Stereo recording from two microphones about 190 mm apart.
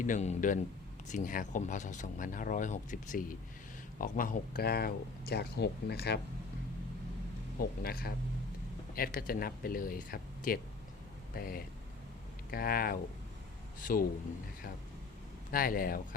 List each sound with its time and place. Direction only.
0.0 s speech: 40° left (ahead or behind); by 6.1 s 60° left (ahead or behind)
7.6 s speech: 55° left (ahead or behind)
15.5 s speech: 50° left (ahead or behind)